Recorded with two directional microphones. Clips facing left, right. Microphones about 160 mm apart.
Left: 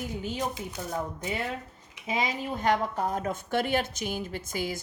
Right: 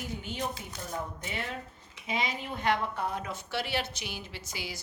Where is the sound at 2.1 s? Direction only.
40° left (ahead or behind).